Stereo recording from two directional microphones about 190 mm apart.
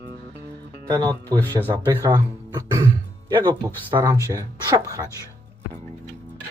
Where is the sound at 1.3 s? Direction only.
10° left (ahead or behind).